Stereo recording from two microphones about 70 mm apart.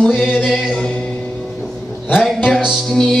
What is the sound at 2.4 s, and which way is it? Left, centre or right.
Music, centre.